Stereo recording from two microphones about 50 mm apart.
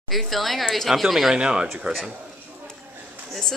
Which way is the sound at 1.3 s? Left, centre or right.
Centre.